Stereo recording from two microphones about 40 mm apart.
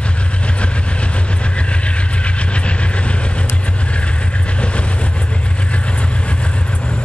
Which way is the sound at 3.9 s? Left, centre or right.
Left.